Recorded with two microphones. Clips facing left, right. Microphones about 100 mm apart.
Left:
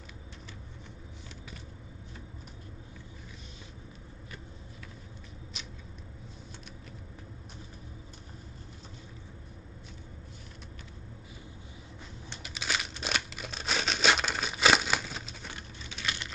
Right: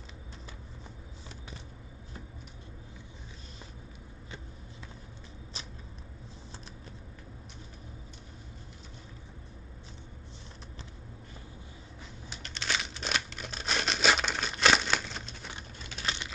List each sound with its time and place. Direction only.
12.4 s crumpling: 5° left (ahead or behind)
15.9 s typing: 35° right (ahead or behind)